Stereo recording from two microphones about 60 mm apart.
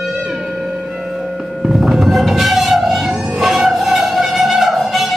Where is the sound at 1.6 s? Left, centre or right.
Centre.